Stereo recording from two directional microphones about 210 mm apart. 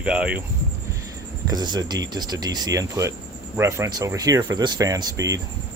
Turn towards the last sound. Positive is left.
turn(degrees=-15)  # may be behind; listen again after turning